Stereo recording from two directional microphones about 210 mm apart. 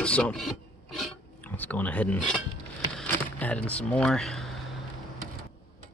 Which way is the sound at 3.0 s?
5° left (ahead or behind).